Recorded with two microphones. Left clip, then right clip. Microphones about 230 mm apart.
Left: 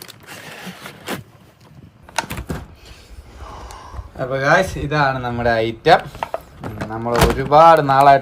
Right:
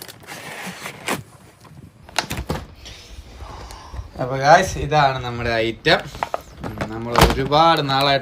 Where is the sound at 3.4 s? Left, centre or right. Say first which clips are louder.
Left 2 dB; left.